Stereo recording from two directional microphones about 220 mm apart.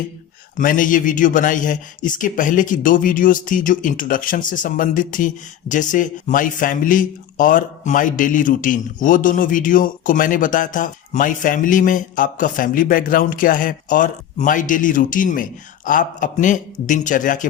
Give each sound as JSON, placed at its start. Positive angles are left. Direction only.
{"t": 0.5, "sound": "speech", "side_deg": 35}